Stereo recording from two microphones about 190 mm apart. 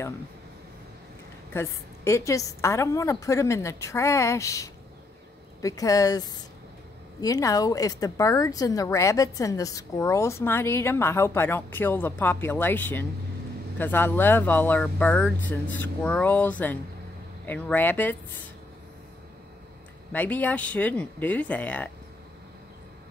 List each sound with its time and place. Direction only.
1.5 s a woman's voice: 15° left (ahead or behind)
20.1 s a woman's voice: 10° left (ahead or behind)